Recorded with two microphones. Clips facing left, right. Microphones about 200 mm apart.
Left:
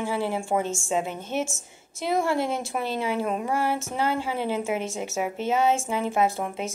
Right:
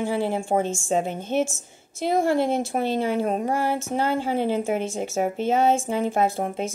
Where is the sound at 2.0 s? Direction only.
50° right (ahead or behind); by 5.6 s 35° right (ahead or behind).